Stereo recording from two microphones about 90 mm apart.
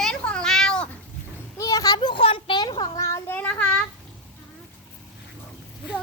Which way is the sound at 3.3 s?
20° left (ahead or behind).